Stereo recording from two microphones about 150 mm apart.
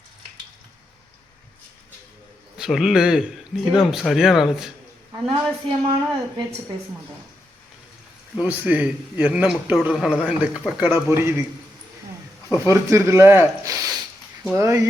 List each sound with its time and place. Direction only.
2.6 s a man's voice: centre (ahead or behind)
5.6 s a woman's voice: 35° right (ahead or behind)
8.4 s a man's voice: 10° right (ahead or behind)
12.5 s speech: 20° right (ahead or behind)